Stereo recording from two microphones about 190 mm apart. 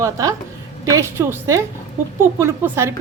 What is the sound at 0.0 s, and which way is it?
A woman's voice, 15° right (ahead or behind).